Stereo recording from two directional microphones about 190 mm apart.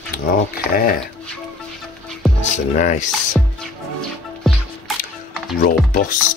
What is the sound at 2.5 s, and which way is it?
Speech, 40° left (ahead or behind).